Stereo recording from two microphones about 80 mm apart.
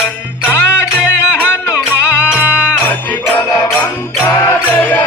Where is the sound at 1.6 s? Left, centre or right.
Left.